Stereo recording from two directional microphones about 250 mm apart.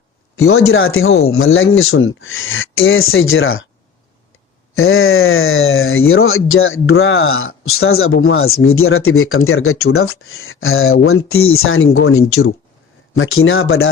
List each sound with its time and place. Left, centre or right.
0.3 s speech: left
4.8 s speech: left